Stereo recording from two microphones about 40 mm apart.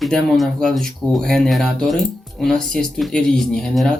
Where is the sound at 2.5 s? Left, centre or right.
Centre.